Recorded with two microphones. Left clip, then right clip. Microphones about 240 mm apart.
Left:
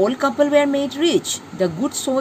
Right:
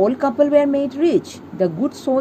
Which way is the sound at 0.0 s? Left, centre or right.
Centre.